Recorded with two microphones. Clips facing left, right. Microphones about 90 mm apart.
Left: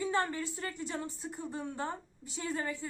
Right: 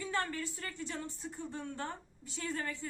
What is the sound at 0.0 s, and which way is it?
A woman's voice, 20° left (ahead or behind).